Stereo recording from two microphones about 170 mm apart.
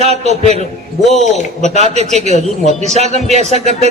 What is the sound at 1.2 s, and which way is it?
Speech, 45° left (ahead or behind).